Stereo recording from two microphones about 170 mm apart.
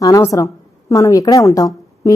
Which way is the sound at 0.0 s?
20° left (ahead or behind).